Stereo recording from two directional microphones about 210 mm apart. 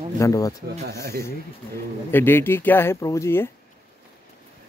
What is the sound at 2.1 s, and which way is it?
Speech, 10° left (ahead or behind).